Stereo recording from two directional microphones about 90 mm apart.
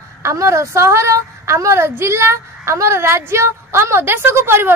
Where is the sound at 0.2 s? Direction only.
35° right (ahead or behind).